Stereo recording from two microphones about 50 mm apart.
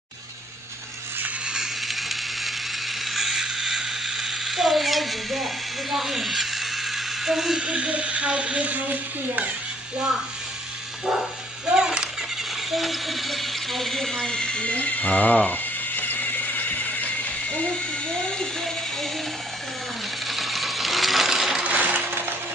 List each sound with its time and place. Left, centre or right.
1.5 s a sound: centre
7.6 s speech: right
11.6 s children playing: centre
12.7 s speech: centre; by 17.3 s left
17.6 s speech: centre
20.2 s coin: centre
21.6 s coin: right